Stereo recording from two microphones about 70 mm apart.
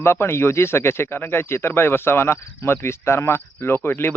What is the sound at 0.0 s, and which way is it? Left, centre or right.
Speech, left.